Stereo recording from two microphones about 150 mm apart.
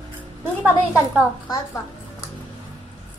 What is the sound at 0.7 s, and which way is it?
Speech, 10° right (ahead or behind).